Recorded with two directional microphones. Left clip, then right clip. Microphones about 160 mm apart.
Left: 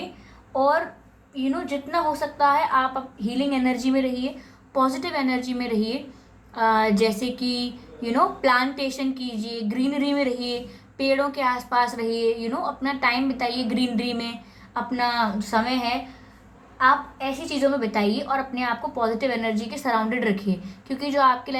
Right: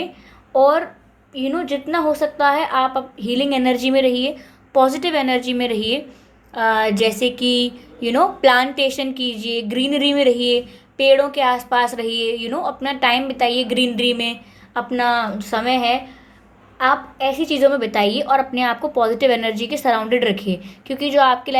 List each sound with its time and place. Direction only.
0.5 s a woman's voice: 40° right (ahead or behind)